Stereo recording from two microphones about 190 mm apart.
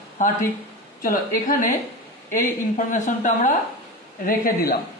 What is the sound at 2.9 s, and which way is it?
Speech, 45° left (ahead or behind).